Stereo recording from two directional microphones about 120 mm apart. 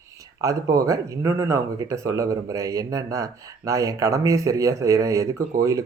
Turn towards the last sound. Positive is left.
turn(degrees=-25)  # may be behind; listen again after turning